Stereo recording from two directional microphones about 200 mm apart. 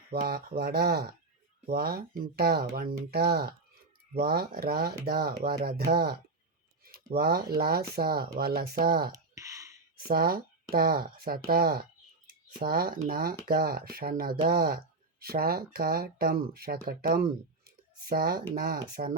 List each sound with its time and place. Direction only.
0.1 s speech: 50° right (ahead or behind)
9.1 s a sound: 15° right (ahead or behind)
10.0 s speech: 50° right (ahead or behind)